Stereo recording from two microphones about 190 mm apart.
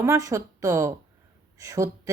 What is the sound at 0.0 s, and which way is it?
Speech, 15° right (ahead or behind).